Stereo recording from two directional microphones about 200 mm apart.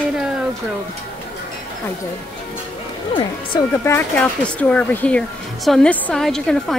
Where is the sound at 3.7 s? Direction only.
10° left (ahead or behind).